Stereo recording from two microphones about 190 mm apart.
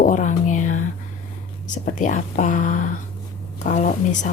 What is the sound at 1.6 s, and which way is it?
Speech, 40° left (ahead or behind).